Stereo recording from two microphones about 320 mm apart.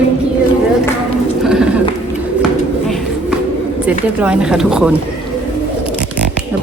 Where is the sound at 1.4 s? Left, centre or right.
Centre.